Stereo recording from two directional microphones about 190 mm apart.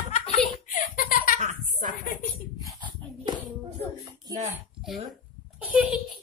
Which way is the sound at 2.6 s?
20° right (ahead or behind).